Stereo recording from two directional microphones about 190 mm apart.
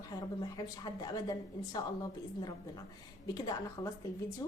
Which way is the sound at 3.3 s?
20° left (ahead or behind).